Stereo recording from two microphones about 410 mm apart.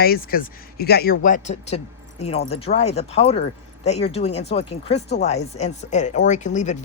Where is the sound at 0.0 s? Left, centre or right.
Left.